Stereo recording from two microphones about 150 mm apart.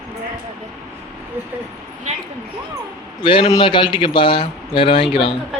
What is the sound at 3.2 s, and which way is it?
Speech, 35° left (ahead or behind).